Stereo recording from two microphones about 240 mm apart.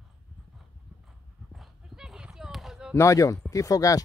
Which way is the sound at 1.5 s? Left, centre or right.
Centre.